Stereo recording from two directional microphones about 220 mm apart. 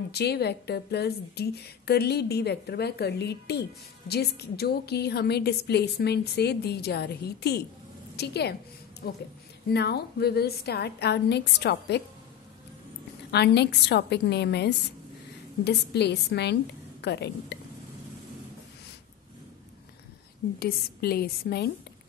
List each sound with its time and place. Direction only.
0.1 s a woman's voice: 45° left (ahead or behind)
13.3 s a woman's voice: 50° left (ahead or behind)
20.5 s a woman's voice: 45° left (ahead or behind)